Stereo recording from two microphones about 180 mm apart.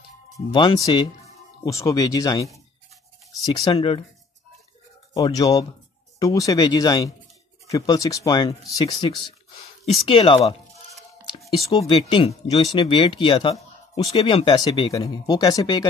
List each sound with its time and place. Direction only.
0.5 s speech: 25° left (ahead or behind)
5.1 s speech: 20° left (ahead or behind)
11.6 s speech: 20° left (ahead or behind)